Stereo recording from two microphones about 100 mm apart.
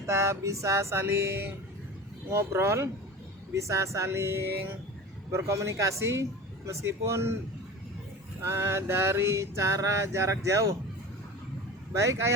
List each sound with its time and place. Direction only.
0.0 s mantra: 30° right (ahead or behind)
8.4 s mantra: 25° right (ahead or behind)
11.9 s mantra: 30° right (ahead or behind)